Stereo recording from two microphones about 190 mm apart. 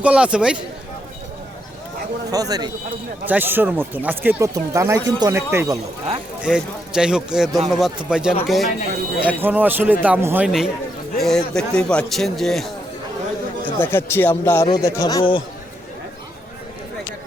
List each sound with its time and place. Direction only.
0.0 s a man's voice: 5° right (ahead or behind)
2.3 s speech: 20° right (ahead or behind)
6.4 s a man's voice: 5° right (ahead or behind)
13.7 s speech: 10° left (ahead or behind)